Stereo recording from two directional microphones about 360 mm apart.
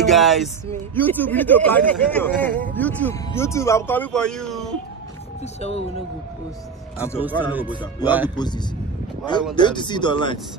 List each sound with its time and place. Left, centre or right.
0.0 s speech: centre
5.4 s speech: centre
7.2 s speech: centre
8.4 s speech: centre